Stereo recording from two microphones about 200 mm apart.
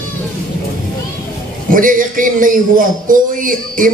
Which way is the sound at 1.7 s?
40° right (ahead or behind).